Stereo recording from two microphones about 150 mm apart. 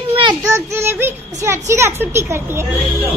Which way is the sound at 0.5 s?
15° right (ahead or behind).